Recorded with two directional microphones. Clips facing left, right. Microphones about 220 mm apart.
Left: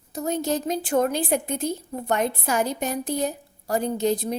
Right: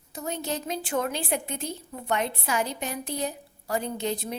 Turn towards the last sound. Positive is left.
turn(degrees=40)  # may be behind; listen again after turning